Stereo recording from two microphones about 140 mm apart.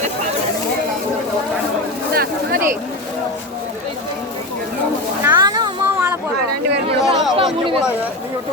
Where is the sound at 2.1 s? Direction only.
90° right.